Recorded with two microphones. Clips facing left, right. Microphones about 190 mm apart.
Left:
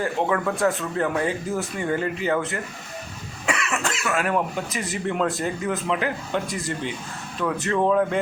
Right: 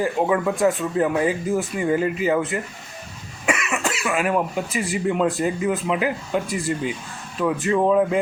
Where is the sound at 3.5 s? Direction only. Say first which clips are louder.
Right 2 dB; 15° right (ahead or behind).